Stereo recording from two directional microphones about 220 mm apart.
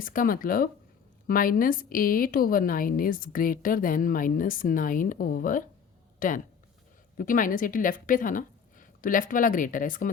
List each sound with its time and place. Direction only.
0.0 s a woman's voice: 40° left (ahead or behind)